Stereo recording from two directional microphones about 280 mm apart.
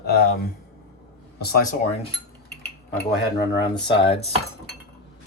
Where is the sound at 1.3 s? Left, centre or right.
Left.